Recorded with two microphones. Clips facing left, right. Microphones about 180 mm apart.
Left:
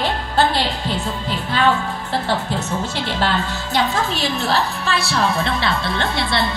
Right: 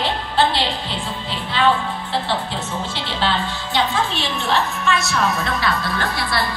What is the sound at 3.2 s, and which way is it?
A woman's voice, 40° left (ahead or behind).